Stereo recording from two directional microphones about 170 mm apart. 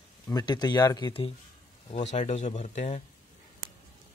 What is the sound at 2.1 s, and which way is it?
Speech, 45° left (ahead or behind).